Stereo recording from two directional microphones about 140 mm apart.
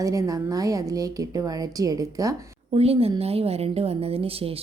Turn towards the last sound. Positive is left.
turn(degrees=-45)  # may be behind; listen again after turning